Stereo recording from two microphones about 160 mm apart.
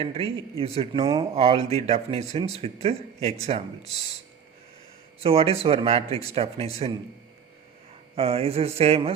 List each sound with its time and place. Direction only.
0.0 s speech: 35° right (ahead or behind)
1.0 s speech: 20° right (ahead or behind)
1.4 s speech: 40° right (ahead or behind)
5.2 s speech: 35° right (ahead or behind)
8.1 s speech: 40° right (ahead or behind)